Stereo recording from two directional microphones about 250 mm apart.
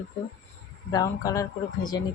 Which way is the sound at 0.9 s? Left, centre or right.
Centre.